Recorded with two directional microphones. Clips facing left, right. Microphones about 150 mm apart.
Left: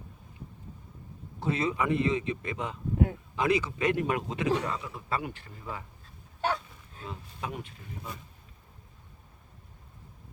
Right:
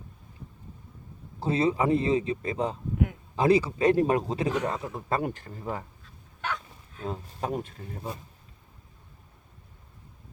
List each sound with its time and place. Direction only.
1.4 s a man's voice: 30° right (ahead or behind)
6.4 s a sound: 35° left (ahead or behind)
7.0 s a man's voice: 40° right (ahead or behind)